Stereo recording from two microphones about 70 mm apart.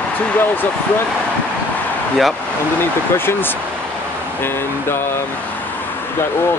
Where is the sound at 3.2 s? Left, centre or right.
Left.